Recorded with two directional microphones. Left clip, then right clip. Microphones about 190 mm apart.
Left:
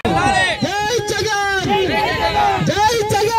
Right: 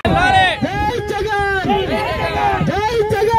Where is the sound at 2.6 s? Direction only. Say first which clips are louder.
Left 1 dB; 40° left (ahead or behind).